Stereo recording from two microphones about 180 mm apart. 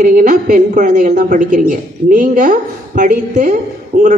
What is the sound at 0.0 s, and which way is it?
A woman's voice, 45° right (ahead or behind).